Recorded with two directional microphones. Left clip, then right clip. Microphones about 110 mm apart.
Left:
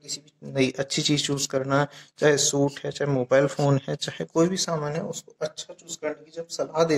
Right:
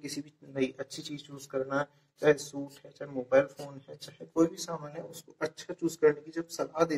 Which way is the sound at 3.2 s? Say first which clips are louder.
Left 5 dB; 40° left (ahead or behind).